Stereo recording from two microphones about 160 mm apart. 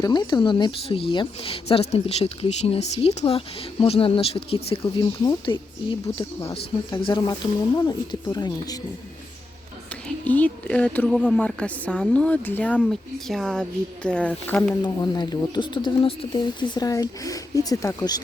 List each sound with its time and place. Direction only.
0.0 s speech: 25° left (ahead or behind)
10.2 s speech: 10° left (ahead or behind)
14.8 s speech: 25° left (ahead or behind)